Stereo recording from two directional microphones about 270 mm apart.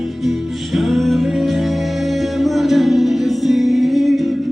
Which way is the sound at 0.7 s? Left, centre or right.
Centre.